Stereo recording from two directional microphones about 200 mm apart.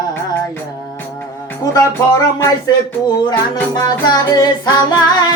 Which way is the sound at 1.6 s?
15° left (ahead or behind).